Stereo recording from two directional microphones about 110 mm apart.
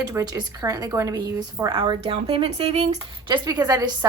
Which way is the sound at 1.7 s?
50° right (ahead or behind).